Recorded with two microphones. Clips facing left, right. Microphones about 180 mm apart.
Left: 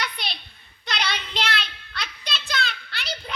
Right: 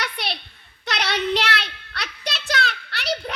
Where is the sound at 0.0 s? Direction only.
70° right (ahead or behind).